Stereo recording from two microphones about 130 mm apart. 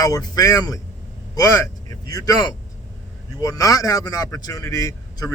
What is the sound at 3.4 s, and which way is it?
Speech, 25° left (ahead or behind).